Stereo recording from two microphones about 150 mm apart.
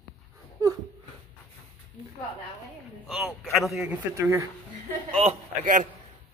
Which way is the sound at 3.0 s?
5° right (ahead or behind).